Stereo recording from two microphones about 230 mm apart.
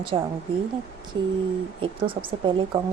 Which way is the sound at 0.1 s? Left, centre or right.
Right.